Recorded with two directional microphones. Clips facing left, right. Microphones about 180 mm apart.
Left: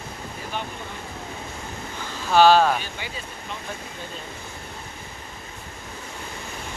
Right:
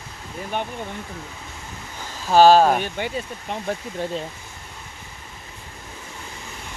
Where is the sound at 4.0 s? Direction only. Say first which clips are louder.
Right 10 dB; 80° right.